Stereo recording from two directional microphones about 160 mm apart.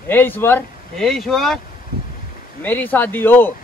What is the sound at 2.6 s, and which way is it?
Speech, 10° left (ahead or behind).